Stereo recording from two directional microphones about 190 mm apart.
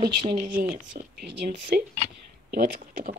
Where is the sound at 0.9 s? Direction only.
65° right (ahead or behind).